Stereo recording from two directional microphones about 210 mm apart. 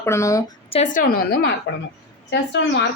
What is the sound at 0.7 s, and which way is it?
A woman's voice, 35° left (ahead or behind).